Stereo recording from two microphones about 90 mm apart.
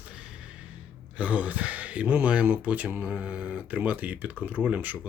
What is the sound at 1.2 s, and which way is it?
Speech, 15° right (ahead or behind).